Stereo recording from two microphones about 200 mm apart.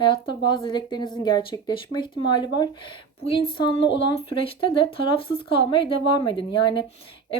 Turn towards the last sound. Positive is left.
turn(degrees=25)  # may be behind; listen again after turning